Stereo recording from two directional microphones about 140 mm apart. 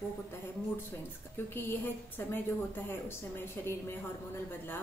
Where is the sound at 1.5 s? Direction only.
15° left (ahead or behind).